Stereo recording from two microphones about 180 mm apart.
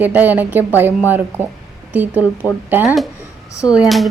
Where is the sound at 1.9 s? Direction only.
10° right (ahead or behind).